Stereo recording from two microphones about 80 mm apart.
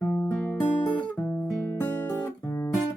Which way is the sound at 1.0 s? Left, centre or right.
Centre.